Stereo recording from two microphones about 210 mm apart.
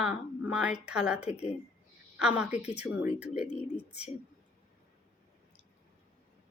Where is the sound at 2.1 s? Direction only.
5° right (ahead or behind).